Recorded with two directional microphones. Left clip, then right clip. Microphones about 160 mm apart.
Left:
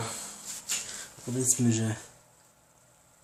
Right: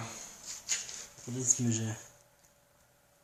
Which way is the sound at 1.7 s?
10° left (ahead or behind).